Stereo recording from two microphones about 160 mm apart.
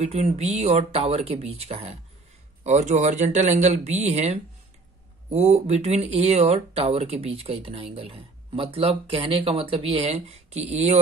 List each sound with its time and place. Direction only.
0.0 s speech: 40° right (ahead or behind)